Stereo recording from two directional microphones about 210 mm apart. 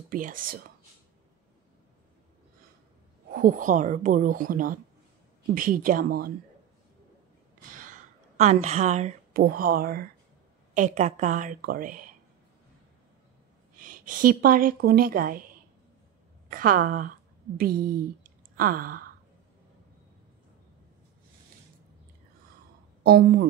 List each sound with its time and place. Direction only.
0.1 s speech: 40° right (ahead or behind)
3.3 s speech: 40° right (ahead or behind)
8.6 s speech: 30° right (ahead or behind)
13.7 s a woman's voice: 40° right (ahead or behind)
16.4 s a woman's voice: 40° right (ahead or behind)
23.0 s speech: 50° right (ahead or behind)